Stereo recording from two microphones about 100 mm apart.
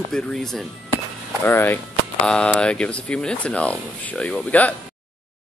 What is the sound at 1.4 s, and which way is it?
Speech, 20° left (ahead or behind).